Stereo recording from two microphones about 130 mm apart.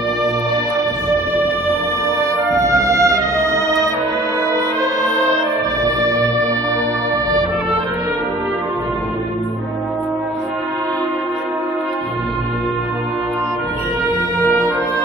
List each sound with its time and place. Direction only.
2.8 s music: 25° right (ahead or behind)